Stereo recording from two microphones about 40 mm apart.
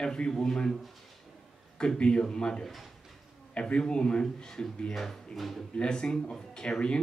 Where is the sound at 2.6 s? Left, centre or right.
Centre.